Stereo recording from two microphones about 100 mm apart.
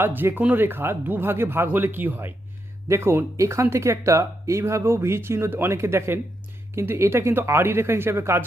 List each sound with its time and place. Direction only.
0.0 s speech: 20° right (ahead or behind)